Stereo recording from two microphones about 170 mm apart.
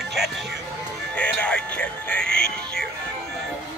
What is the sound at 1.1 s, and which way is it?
Music, 10° left (ahead or behind).